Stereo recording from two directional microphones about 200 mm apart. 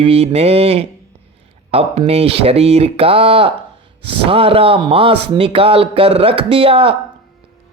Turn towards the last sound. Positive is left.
turn(degrees=-25)  # may be behind; listen again after turning